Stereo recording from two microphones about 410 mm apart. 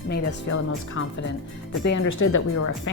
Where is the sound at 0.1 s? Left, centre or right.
Left.